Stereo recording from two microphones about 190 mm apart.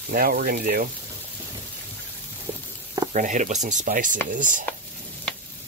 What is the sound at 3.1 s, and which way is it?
Speech, 40° right (ahead or behind).